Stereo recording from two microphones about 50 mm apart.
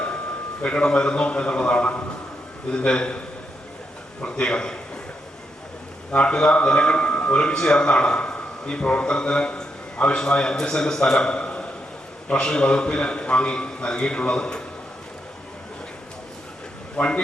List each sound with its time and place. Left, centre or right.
0.6 s a man's voice: centre
4.2 s a man's voice: centre
6.1 s a man's voice: left
17.0 s a man's voice: centre